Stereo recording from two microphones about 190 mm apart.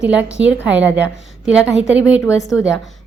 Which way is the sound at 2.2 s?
15° left (ahead or behind).